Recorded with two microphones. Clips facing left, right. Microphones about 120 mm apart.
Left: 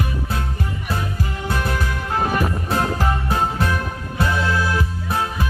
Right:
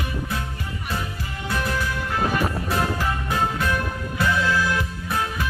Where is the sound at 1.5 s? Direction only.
40° left (ahead or behind).